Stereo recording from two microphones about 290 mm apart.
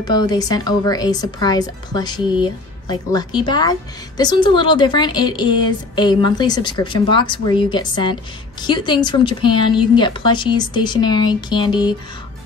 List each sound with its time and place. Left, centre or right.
0.0 s a woman's voice: centre